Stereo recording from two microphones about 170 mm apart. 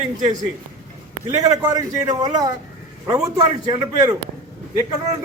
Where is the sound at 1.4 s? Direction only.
20° right (ahead or behind).